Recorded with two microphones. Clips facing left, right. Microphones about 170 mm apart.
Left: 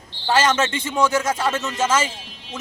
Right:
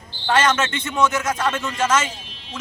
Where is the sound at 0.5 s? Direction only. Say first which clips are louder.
Left 2 dB; 30° left (ahead or behind).